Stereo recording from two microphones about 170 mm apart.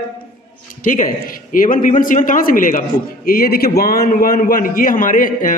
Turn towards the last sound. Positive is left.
turn(degrees=50)  # may be behind; listen again after turning